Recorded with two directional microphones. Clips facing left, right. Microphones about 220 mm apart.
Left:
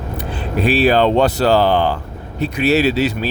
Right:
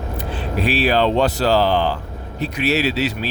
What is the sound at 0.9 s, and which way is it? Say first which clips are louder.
Speech: left 3 dB; 55° left (ahead or behind).